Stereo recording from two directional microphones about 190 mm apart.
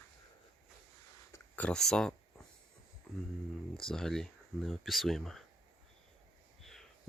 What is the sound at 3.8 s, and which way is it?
Speech, centre (ahead or behind).